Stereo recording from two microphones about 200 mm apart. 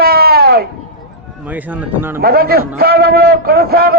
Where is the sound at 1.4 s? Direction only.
10° right (ahead or behind).